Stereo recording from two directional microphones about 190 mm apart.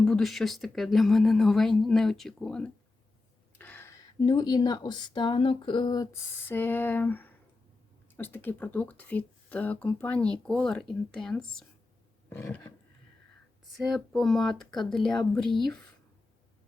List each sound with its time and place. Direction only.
0.0 s speech: centre (ahead or behind); by 6.1 s 20° left (ahead or behind)
6.5 s speech: 10° left (ahead or behind)
13.7 s speech: centre (ahead or behind)